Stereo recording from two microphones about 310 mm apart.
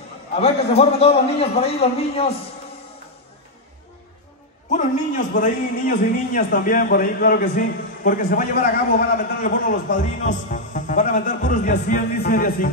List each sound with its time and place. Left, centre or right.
0.4 s a man's voice: centre
4.6 s a man's voice: left